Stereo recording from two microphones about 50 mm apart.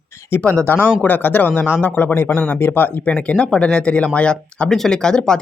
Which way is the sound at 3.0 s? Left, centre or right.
Left.